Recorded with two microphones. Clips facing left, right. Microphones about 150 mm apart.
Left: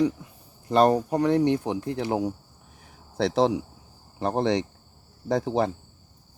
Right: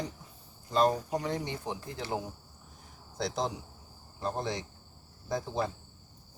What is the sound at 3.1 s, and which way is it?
Speech, 75° left (ahead or behind).